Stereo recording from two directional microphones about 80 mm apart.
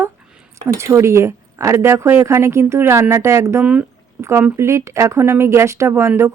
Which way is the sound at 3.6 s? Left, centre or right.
Centre.